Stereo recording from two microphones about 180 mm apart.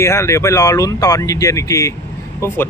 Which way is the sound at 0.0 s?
15° left (ahead or behind).